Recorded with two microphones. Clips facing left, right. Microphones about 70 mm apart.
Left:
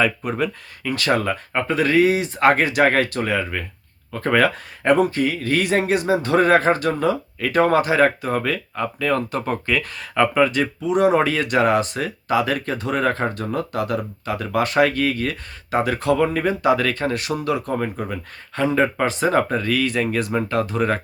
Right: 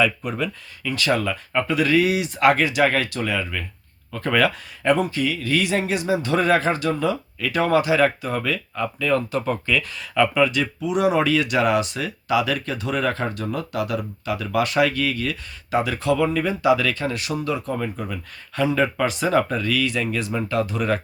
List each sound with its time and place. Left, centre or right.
0.0 s speech: left